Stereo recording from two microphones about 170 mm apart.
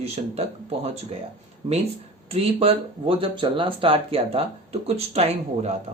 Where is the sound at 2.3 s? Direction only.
35° right (ahead or behind).